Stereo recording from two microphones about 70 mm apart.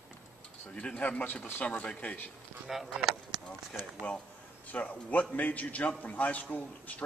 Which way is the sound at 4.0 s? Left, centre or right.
Centre.